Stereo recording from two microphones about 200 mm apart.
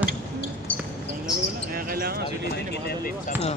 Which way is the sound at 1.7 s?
45° right (ahead or behind).